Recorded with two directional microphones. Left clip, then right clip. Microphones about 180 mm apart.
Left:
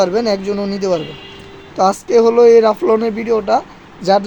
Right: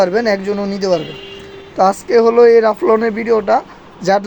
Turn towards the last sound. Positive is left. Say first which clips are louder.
# left 1 dB
turn(degrees=-10)  # may be behind; listen again after turning